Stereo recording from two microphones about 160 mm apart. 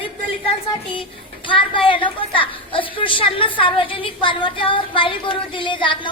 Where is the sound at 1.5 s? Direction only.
30° left (ahead or behind).